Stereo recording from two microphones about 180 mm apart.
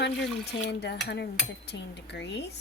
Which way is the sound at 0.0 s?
70° left (ahead or behind).